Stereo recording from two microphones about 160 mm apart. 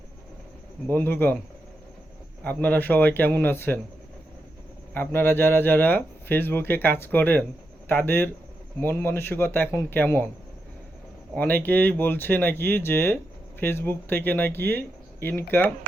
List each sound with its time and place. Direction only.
0.9 s speech: 10° left (ahead or behind)
2.4 s speech: 10° left (ahead or behind)
4.9 s speech: 15° left (ahead or behind)
11.3 s speech: 10° left (ahead or behind)